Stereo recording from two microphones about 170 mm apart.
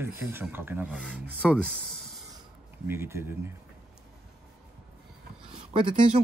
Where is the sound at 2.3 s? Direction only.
15° right (ahead or behind).